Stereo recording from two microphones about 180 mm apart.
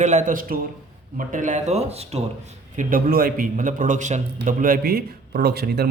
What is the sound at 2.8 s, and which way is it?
A man's voice, 50° right (ahead or behind).